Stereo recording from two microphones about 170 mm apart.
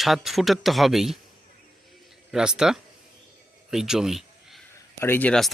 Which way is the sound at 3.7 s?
5° right (ahead or behind).